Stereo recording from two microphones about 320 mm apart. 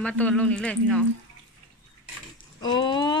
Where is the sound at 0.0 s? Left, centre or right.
Centre.